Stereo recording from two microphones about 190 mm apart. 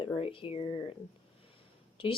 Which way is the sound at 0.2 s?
30° left (ahead or behind).